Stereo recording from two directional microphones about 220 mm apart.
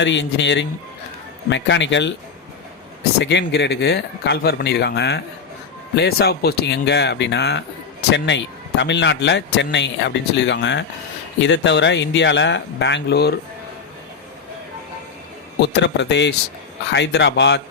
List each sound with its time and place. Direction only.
0.0 s speech: 55° left (ahead or behind)
3.2 s speech: 50° left (ahead or behind)
15.6 s speech: 50° left (ahead or behind)